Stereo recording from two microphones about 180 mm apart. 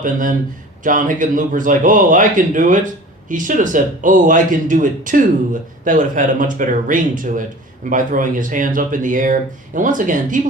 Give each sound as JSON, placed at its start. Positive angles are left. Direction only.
{"t": 0.0, "sound": "speech", "side_deg": -45}